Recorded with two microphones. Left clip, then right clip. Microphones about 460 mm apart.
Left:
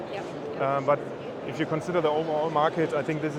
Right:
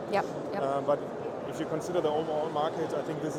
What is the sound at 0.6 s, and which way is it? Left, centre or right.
Speech, left.